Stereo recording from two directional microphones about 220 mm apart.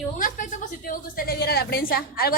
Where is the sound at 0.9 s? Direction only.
40° left (ahead or behind).